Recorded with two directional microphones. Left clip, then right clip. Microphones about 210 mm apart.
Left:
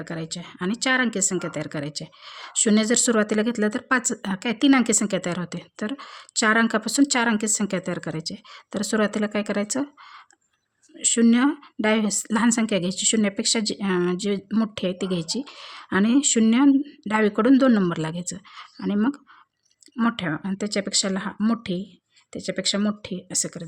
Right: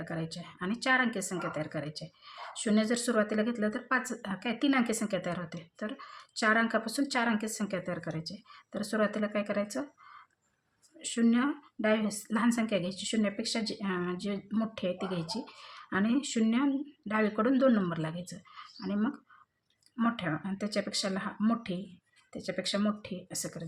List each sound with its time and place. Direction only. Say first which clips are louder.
0.0 s speech: left 6 dB; 45° left (ahead or behind)